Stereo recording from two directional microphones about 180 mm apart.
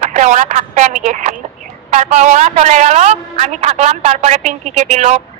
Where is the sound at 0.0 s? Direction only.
45° right (ahead or behind).